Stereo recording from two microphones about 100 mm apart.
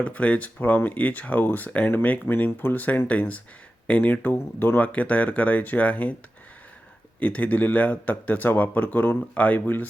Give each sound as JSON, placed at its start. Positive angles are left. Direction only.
{"t": 0.0, "sound": "speech", "side_deg": 15}
{"t": 7.2, "sound": "speech", "side_deg": 15}